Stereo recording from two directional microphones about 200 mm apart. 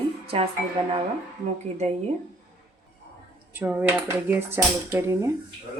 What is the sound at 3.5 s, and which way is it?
Speech, 10° right (ahead or behind).